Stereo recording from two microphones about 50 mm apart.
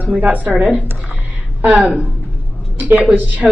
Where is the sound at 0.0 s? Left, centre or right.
Right.